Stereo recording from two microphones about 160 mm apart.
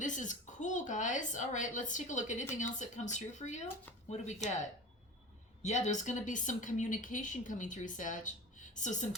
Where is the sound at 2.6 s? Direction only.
50° left (ahead or behind).